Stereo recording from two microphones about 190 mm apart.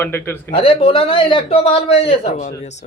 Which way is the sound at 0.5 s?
30° left (ahead or behind).